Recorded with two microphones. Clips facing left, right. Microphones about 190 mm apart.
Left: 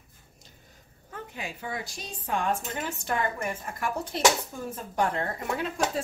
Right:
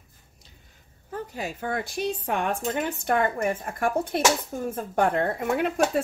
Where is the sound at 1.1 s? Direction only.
40° right (ahead or behind).